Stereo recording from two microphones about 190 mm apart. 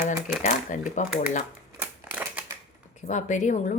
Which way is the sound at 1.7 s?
10° right (ahead or behind).